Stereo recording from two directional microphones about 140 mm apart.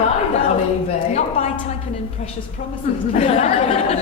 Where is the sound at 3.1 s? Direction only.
50° left (ahead or behind).